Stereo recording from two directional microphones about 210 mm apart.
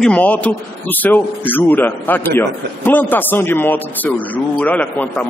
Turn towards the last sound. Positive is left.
turn(degrees=10)  # may be behind; listen again after turning